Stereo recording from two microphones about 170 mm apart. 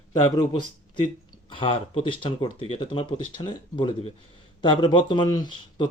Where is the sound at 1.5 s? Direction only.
30° left (ahead or behind).